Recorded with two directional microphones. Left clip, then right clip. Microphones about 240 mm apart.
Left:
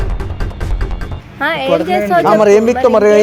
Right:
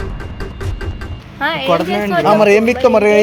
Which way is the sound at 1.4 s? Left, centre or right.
Left.